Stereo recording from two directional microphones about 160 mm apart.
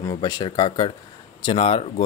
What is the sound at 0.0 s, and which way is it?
Speech, 20° left (ahead or behind).